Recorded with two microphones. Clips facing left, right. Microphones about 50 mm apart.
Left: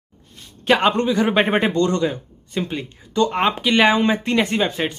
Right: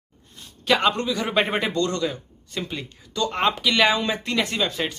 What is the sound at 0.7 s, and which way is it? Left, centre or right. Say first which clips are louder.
Speech: left 4 dB; left.